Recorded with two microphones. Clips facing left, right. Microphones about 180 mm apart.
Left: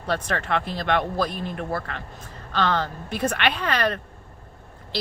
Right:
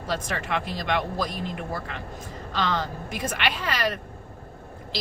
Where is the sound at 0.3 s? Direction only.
10° right (ahead or behind).